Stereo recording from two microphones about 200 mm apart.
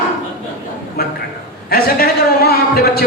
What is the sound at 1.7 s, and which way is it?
A man's voice, 50° left (ahead or behind).